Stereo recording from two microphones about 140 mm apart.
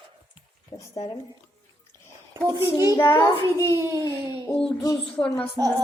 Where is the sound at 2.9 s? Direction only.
25° left (ahead or behind).